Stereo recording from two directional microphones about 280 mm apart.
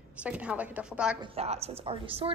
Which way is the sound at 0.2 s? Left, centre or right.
Centre.